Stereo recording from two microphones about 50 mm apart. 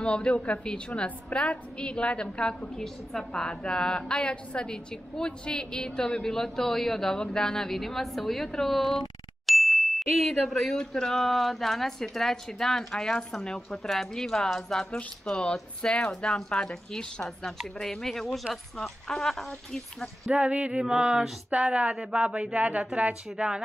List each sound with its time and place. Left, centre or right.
0.0 s a woman's voice: left
3.1 s ding: centre
20.3 s speech: right
23.3 s speech: centre